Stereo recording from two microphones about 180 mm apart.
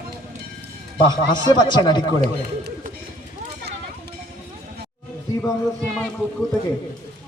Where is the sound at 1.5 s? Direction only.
25° left (ahead or behind).